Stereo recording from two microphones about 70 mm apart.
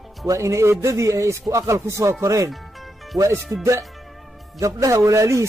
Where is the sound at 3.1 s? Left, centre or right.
Right.